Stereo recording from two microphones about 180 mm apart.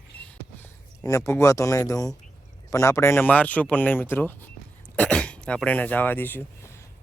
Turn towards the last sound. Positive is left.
turn(degrees=15)  # may be behind; listen again after turning